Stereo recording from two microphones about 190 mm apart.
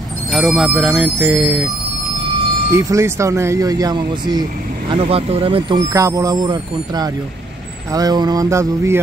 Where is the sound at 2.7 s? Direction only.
15° right (ahead or behind).